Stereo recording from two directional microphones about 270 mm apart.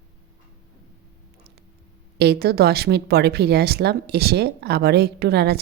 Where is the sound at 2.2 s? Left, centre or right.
Right.